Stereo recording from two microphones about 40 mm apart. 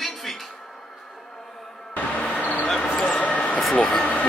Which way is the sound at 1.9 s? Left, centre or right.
Left.